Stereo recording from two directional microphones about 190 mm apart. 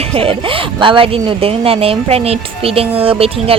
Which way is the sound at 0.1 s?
30° right (ahead or behind).